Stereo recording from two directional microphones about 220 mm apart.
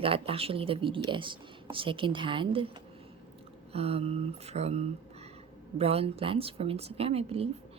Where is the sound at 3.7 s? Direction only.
25° right (ahead or behind).